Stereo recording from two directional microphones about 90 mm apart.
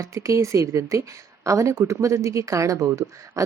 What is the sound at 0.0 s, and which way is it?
Speech, 35° right (ahead or behind).